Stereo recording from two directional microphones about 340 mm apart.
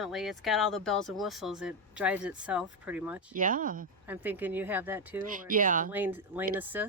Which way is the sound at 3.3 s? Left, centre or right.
Right.